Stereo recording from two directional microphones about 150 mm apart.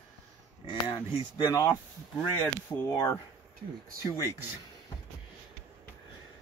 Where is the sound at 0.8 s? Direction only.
30° left (ahead or behind).